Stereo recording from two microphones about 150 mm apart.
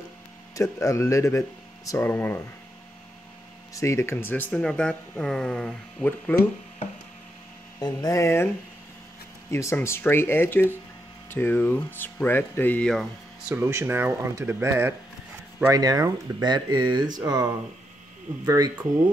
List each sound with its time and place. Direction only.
0.6 s speech: 20° left (ahead or behind)
3.7 s speech: 20° left (ahead or behind)
7.8 s speech: 25° left (ahead or behind)
9.5 s speech: 20° left (ahead or behind)
13.5 s speech: 15° right (ahead or behind)